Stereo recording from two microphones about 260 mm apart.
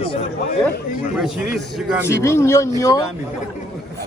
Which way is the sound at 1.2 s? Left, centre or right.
Centre.